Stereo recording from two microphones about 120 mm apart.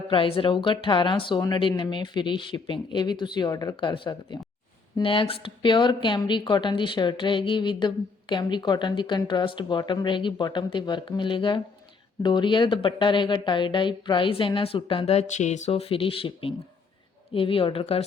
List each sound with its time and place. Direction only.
0.1 s speech: 45° left (ahead or behind)